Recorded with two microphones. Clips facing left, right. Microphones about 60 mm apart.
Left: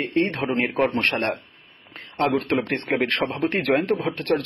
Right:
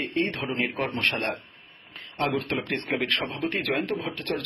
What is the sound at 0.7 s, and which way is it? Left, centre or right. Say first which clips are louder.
Speech: left 6 dB; left.